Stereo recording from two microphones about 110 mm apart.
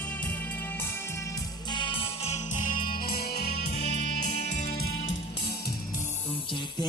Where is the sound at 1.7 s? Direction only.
50° left (ahead or behind).